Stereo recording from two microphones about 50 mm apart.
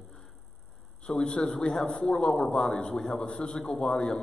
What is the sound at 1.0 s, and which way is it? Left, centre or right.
A man's voice, centre.